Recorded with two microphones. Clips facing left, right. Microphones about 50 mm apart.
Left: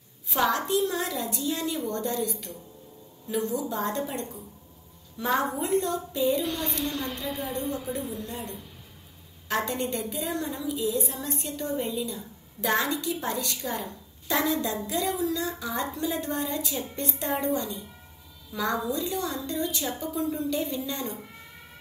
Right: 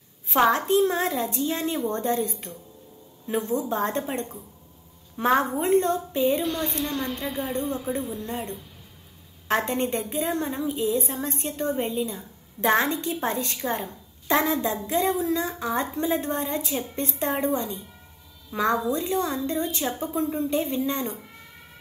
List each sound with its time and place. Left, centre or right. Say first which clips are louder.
0.3 s a woman's voice: right 5 dB; right
6.4 s a woman's voice: right 3 dB; centre
8.3 s a woman's voice: right 5 dB; right